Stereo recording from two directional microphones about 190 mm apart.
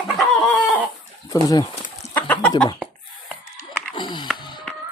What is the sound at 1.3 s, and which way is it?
Speech, 20° left (ahead or behind).